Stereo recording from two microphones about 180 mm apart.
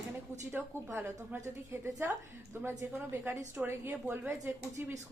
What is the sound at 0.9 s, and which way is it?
A woman's voice, 10° right (ahead or behind).